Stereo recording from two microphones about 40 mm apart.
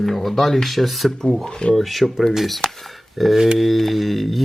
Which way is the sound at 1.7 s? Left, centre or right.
Centre.